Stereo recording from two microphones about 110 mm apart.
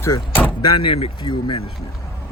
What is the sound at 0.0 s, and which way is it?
Door, 20° left (ahead or behind).